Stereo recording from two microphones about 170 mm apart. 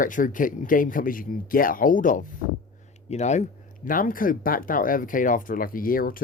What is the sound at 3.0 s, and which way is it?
Speech, 40° left (ahead or behind).